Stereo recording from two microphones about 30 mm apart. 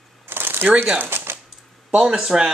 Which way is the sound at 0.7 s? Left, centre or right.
Right.